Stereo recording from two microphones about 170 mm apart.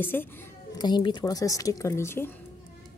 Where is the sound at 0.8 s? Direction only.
25° left (ahead or behind).